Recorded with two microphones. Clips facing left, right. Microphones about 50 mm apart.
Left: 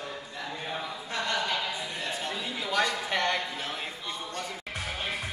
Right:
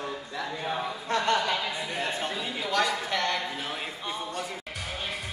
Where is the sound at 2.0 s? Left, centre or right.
Right.